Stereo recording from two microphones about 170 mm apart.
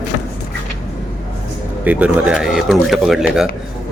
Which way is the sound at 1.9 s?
10° right (ahead or behind).